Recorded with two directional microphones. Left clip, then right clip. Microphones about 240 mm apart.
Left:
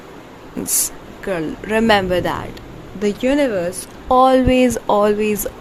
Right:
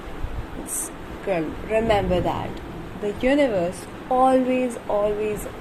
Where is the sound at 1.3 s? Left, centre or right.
Left.